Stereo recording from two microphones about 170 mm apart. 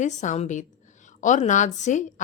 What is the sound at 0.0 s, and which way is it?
A woman's voice, 45° left (ahead or behind).